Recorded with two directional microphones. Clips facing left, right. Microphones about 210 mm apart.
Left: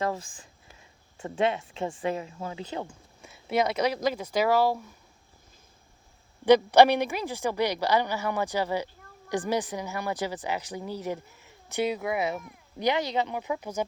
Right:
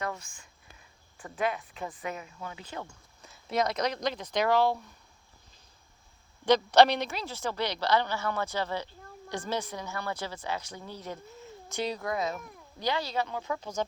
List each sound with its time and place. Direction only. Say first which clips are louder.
0.0 s speech: left 6 dB; 30° left (ahead or behind)
3.2 s a woman's voice: left 3 dB; 10° left (ahead or behind)
6.4 s a woman's voice: left 4 dB; 10° left (ahead or behind)